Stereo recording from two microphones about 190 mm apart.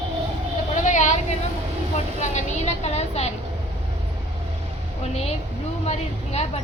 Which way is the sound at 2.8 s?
35° left (ahead or behind).